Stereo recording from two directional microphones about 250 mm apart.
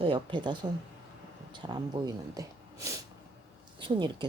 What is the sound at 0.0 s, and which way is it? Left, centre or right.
Speech, centre.